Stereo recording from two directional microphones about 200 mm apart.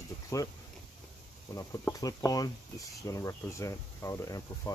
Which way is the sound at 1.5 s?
15° left (ahead or behind).